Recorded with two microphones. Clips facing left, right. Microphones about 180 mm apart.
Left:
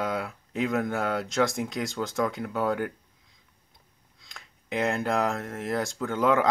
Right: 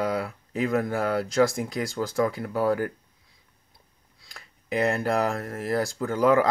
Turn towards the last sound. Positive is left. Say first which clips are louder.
# right 3 dB
turn(degrees=0)  # may be behind; listen again after turning